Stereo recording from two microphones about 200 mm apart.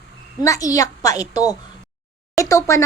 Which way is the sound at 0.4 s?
15° left (ahead or behind).